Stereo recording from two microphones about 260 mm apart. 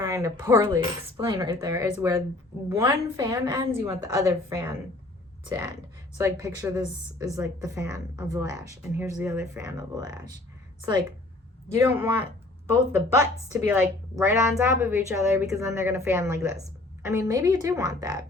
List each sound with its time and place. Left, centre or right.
0.0 s a woman's voice: centre
12.7 s a woman's voice: centre